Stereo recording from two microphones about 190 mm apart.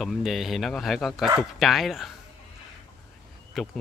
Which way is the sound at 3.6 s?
Centre (ahead or behind).